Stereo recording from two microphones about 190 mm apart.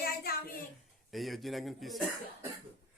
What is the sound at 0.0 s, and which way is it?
Child singing, 55° left (ahead or behind).